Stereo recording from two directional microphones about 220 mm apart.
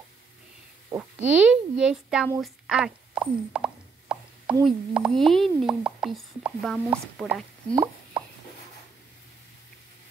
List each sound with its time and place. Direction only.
0.9 s a sound: 15° right (ahead or behind)
1.4 s speech: 5° right (ahead or behind)
2.4 s plop: 5° right (ahead or behind)
4.6 s speech: 5° right (ahead or behind)
7.7 s speech: 15° right (ahead or behind)